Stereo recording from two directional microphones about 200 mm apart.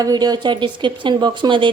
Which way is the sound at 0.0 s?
20° right (ahead or behind).